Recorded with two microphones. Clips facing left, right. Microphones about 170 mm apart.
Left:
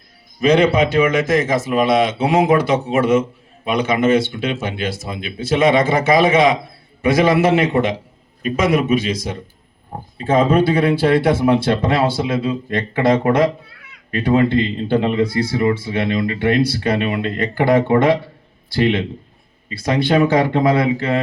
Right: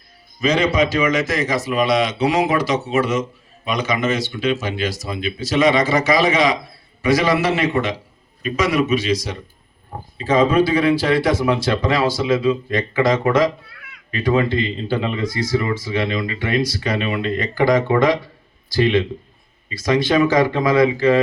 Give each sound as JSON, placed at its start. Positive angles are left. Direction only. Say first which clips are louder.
{"t": 0.3, "sound": "a man's voice", "louder": "left 4 dB", "side_deg": 60}